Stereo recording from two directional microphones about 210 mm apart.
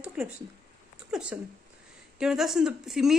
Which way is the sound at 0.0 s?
5° right (ahead or behind).